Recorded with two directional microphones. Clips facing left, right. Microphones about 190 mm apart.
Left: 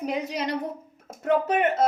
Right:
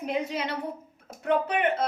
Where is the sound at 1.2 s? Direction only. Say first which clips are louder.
Left 3 dB; 45° left (ahead or behind).